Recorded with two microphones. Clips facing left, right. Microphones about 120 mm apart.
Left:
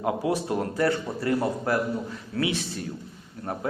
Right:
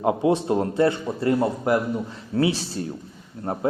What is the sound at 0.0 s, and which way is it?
A man's voice, 25° right (ahead or behind).